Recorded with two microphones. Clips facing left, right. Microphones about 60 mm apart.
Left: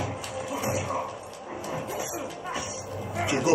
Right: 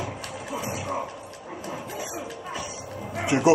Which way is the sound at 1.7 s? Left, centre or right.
Centre.